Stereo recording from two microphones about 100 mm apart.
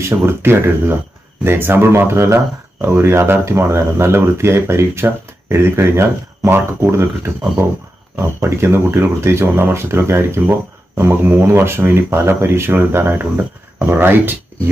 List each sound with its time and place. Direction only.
0.0 s speech: 25° right (ahead or behind)